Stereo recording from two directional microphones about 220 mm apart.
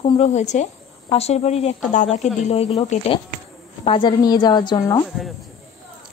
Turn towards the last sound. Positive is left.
turn(degrees=20)  # may be behind; listen again after turning